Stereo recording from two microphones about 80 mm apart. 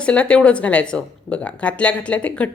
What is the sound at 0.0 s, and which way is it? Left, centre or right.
A woman's voice, centre.